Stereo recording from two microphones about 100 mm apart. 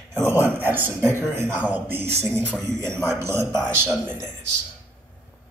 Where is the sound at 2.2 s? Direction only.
10° left (ahead or behind).